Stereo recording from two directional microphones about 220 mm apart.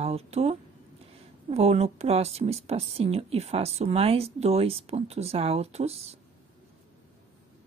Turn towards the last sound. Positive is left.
turn(degrees=-30)  # may be behind; listen again after turning